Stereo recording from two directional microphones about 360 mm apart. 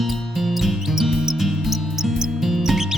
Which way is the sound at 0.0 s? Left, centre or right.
Centre.